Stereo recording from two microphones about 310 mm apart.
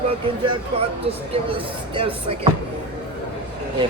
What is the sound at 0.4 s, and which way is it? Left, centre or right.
Speech, centre.